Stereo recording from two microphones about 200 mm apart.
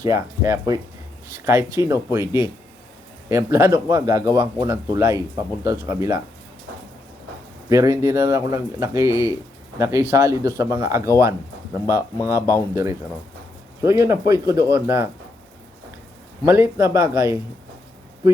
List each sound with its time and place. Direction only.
0.0 s speech: 15° right (ahead or behind)
7.7 s speech: 15° right (ahead or behind)
16.5 s speech: 15° right (ahead or behind)